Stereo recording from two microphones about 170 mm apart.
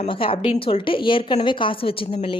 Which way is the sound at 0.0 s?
35° left (ahead or behind).